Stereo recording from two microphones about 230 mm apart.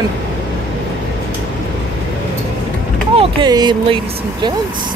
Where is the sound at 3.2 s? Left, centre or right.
Centre.